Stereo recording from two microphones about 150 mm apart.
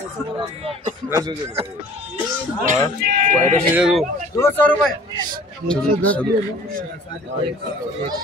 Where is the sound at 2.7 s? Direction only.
60° right (ahead or behind).